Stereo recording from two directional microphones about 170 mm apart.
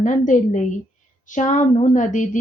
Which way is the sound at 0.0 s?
45° left (ahead or behind).